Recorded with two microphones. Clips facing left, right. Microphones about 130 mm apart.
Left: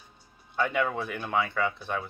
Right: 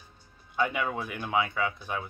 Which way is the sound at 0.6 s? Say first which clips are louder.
Left 2 dB; 10° right (ahead or behind).